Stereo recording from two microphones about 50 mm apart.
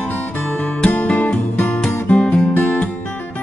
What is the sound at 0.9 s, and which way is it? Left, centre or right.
Music, left.